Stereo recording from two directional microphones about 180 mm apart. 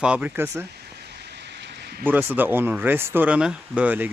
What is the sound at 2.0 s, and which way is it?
Speech, 10° right (ahead or behind).